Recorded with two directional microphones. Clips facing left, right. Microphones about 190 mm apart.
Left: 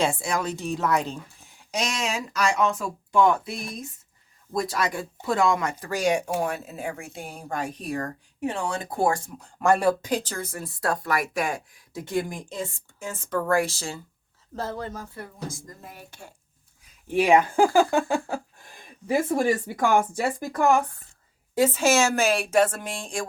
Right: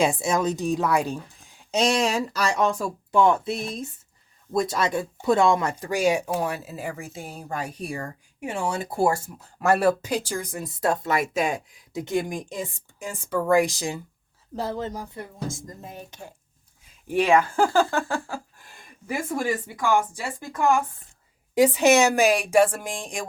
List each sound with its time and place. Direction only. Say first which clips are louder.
0.0 s speech: right 3 dB; 20° right (ahead or behind)
1.7 s speech: right 6 dB; 30° right (ahead or behind)
5.9 s speech: right 1 dB; 5° right (ahead or behind)
17.2 s speech: left 1 dB; 15° left (ahead or behind)
19.0 s speech: left 4 dB; 30° left (ahead or behind)
19.7 s speech: left 1 dB; 55° left (ahead or behind)
20.4 s speech: even; 35° left (ahead or behind)
21.5 s speech: right 3 dB; 15° right (ahead or behind)